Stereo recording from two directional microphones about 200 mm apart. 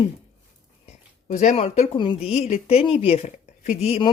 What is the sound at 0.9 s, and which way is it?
Speech, 35° left (ahead or behind).